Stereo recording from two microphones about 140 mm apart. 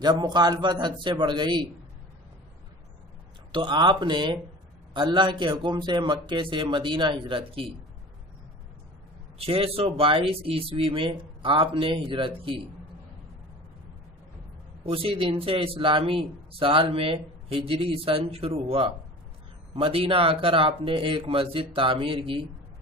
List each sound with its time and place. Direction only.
0.0 s speech: 30° right (ahead or behind)
3.5 s speech: 35° right (ahead or behind)
9.4 s speech: 45° right (ahead or behind)
14.8 s speech: 40° right (ahead or behind)